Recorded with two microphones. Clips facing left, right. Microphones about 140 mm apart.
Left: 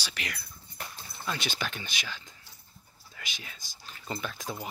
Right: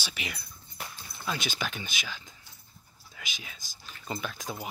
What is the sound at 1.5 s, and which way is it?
Speech, 5° right (ahead or behind).